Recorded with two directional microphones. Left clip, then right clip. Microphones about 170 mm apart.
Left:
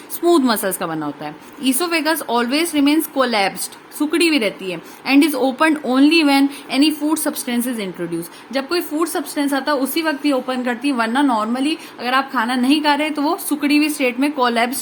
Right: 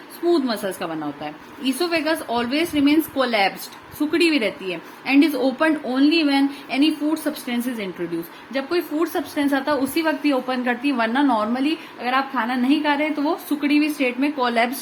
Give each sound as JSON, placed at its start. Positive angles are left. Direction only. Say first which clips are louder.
{"t": 0.3, "sound": "a woman's voice", "louder": "left 5 dB", "side_deg": 40}